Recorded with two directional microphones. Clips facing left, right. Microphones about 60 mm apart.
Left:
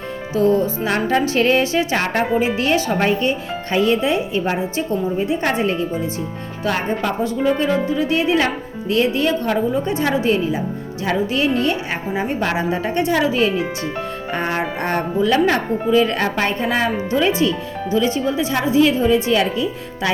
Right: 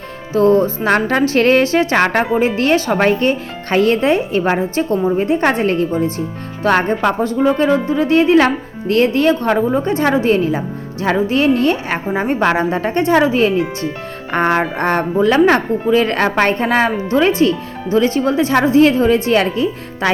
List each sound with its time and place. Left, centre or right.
0.3 s a woman's voice: right
7.9 s a woman's voice: right